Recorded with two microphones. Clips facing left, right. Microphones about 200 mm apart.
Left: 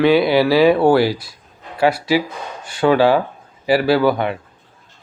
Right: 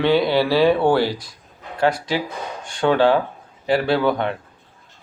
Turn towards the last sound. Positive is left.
turn(degrees=5)  # may be behind; listen again after turning